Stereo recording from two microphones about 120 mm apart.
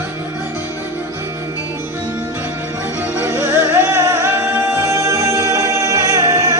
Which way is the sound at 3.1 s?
20° right (ahead or behind).